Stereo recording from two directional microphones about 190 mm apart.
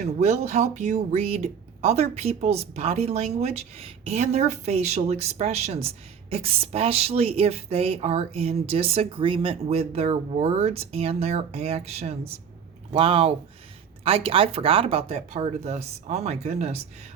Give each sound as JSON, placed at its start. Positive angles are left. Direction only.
{"t": 0.0, "sound": "a woman's voice", "side_deg": -35}